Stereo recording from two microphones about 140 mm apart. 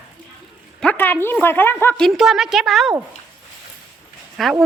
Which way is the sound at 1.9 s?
Centre (ahead or behind).